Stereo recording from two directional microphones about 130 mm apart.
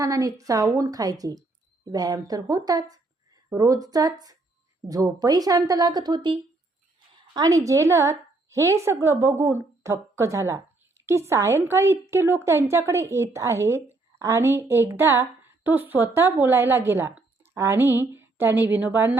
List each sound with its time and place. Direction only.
0.0 s a woman's voice: 25° right (ahead or behind)